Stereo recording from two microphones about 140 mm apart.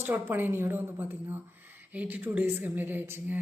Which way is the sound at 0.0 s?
15° right (ahead or behind).